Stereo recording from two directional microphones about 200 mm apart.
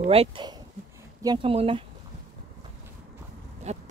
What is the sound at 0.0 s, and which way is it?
Speech, 30° right (ahead or behind).